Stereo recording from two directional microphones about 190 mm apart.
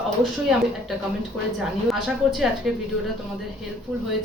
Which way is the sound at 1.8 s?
Centre (ahead or behind).